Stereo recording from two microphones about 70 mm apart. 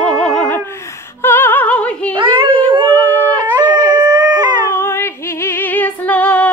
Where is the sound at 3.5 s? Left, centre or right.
Right.